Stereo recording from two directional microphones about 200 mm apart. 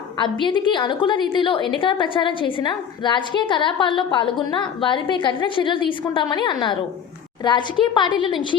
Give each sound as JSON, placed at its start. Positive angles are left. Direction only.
{"t": 0.2, "sound": "a woman's voice", "side_deg": 25}